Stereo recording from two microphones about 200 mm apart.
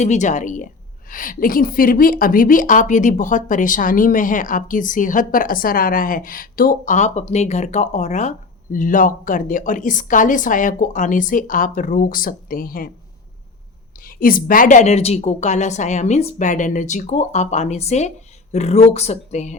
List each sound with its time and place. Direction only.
0.0 s a woman's voice: 35° left (ahead or behind)
14.0 s a woman's voice: 45° left (ahead or behind)